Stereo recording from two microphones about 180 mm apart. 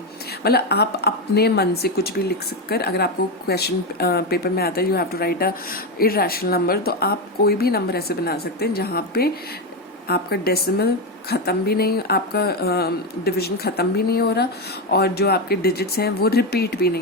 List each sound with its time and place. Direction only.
0.4 s a woman's voice: 65° left (ahead or behind)